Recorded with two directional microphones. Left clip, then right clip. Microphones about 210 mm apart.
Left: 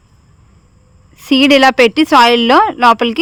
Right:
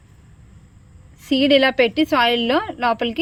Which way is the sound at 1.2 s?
50° left (ahead or behind).